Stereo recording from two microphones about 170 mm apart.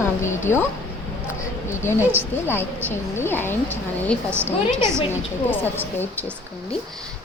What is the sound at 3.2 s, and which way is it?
Speech, 15° left (ahead or behind).